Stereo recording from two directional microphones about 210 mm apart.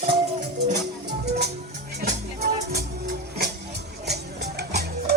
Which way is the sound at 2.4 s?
50° right (ahead or behind).